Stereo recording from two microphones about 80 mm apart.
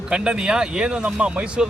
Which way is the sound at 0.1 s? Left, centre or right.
Centre.